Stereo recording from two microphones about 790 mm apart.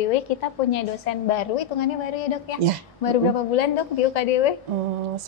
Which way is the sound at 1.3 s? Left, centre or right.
Left.